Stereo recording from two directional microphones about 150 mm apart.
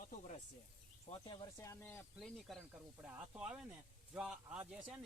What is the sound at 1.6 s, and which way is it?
Speech, 15° left (ahead or behind).